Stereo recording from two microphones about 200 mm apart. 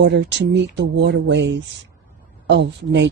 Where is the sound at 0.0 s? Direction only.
60° right (ahead or behind).